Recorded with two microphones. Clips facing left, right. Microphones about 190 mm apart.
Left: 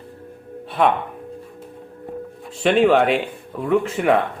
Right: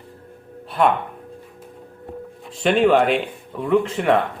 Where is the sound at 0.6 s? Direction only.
Centre (ahead or behind).